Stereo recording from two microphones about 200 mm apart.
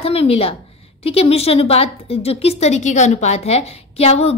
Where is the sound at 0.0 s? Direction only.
30° left (ahead or behind).